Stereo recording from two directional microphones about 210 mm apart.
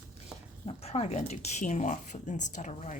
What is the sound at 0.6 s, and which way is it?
Speech, 30° left (ahead or behind).